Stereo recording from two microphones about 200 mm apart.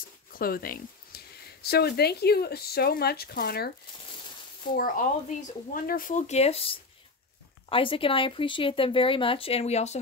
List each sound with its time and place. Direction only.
0.3 s speech: 45° left (ahead or behind)
4.7 s speech: 45° left (ahead or behind)